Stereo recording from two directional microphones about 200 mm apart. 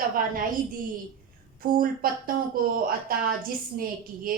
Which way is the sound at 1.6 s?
45° right (ahead or behind).